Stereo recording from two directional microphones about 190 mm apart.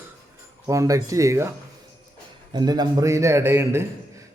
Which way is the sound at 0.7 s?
15° right (ahead or behind).